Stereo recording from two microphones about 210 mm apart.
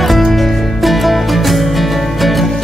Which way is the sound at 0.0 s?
Centre (ahead or behind).